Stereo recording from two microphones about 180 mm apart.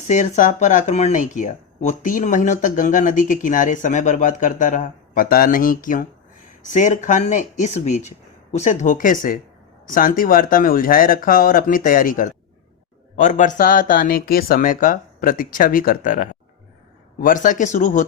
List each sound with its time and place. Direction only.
0.1 s speech: 45° left (ahead or behind)